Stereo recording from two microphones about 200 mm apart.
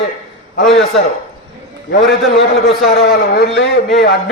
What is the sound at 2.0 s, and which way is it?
Speech, centre (ahead or behind).